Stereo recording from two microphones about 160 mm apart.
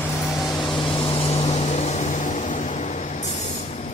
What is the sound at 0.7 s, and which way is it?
Vehicle, 30° left (ahead or behind).